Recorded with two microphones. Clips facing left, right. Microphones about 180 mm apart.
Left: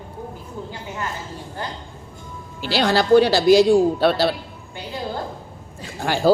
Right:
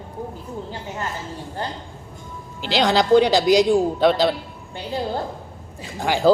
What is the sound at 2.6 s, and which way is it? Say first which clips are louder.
A man's voice: even; 20° right (ahead or behind).